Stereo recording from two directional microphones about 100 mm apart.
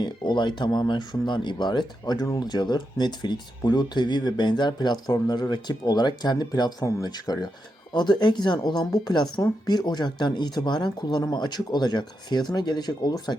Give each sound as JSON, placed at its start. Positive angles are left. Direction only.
{"t": 0.0, "sound": "speech", "side_deg": 50}